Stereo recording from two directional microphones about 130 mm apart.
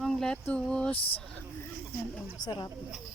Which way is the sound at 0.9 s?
45° left (ahead or behind).